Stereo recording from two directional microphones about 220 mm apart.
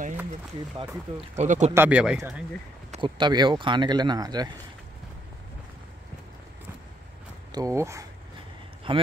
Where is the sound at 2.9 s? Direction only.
20° right (ahead or behind).